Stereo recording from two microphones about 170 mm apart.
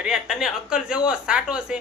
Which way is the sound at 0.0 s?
5° right (ahead or behind).